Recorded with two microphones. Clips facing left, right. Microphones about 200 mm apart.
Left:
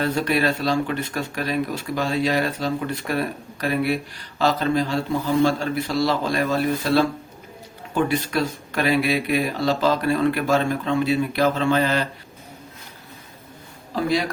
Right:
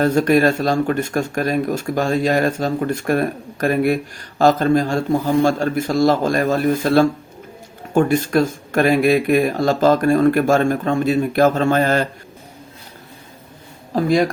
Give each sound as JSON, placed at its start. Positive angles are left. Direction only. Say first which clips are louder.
{"t": 0.0, "sound": "speech", "louder": "right 7 dB", "side_deg": -45}
{"t": 13.9, "sound": "speech", "louder": "right 6 dB", "side_deg": -50}